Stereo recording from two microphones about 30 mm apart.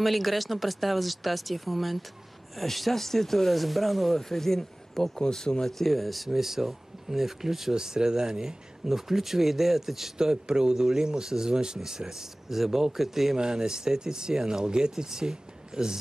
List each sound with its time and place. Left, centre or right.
0.0 s speech: centre
4.3 s speech: centre
5.2 s speech: left
5.7 s speech: centre
7.7 s speech: right
10.1 s speech: right
12.4 s speech: centre
13.4 s speech: right